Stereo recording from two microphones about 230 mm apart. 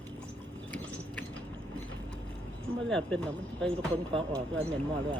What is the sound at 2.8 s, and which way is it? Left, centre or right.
Speech, centre.